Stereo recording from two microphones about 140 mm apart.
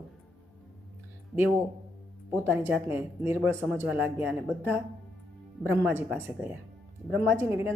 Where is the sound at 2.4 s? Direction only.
15° right (ahead or behind).